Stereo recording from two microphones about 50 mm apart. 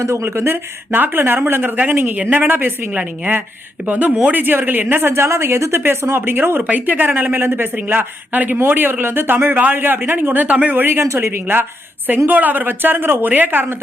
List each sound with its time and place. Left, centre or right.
0.0 s a woman's voice: right
0.3 s speech: right
1.8 s a woman's voice: right
2.3 s speech: right
2.9 s a woman's voice: right
5.1 s a woman's voice: right
10.4 s a woman's voice: right
10.8 s speech: right
11.0 s speech: right
11.3 s a woman's voice: right